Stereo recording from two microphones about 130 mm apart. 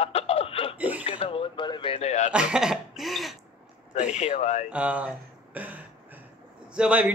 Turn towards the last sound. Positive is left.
turn(degrees=-10)  # may be behind; listen again after turning